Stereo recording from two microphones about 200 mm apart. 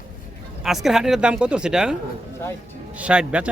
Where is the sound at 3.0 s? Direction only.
5° right (ahead or behind).